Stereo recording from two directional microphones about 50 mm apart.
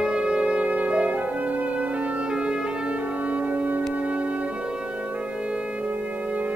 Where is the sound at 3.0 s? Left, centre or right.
Right.